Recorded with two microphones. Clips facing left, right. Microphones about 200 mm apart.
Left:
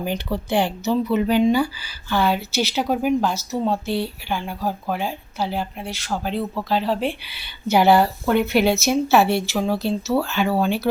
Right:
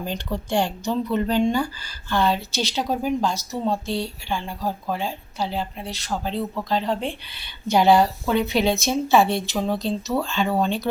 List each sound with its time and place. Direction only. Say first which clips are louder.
0.0 s speech: left 3 dB; 10° left (ahead or behind)